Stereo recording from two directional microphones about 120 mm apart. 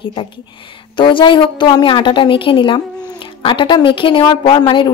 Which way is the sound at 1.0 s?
45° left (ahead or behind).